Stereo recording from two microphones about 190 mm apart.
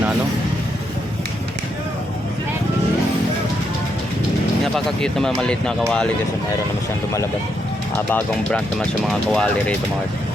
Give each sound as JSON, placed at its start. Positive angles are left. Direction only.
{"t": 4.6, "sound": "speech", "side_deg": 5}
{"t": 8.1, "sound": "speech", "side_deg": 5}